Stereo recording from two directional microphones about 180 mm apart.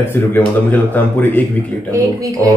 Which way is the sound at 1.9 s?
20° right (ahead or behind).